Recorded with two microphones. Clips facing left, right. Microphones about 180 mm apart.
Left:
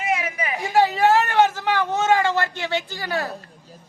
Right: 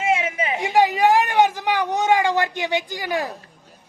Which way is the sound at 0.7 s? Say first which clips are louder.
Even; 15° right (ahead or behind).